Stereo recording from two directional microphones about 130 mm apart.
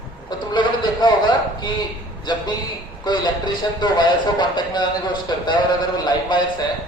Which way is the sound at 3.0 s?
35° left (ahead or behind).